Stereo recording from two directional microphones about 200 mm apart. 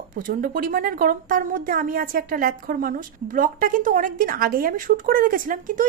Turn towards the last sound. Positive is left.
turn(degrees=-40)  # may be behind; listen again after turning